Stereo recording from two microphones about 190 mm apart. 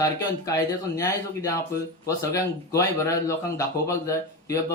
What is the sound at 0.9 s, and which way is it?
Speech, 15° left (ahead or behind).